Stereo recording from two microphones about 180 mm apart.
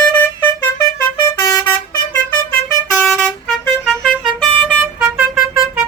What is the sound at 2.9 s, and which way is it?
Vehicle, centre (ahead or behind).